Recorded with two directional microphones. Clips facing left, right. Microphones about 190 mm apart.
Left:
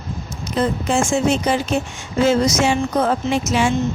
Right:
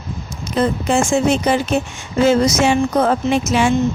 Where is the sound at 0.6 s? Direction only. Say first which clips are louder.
Right 2 dB; 60° right (ahead or behind).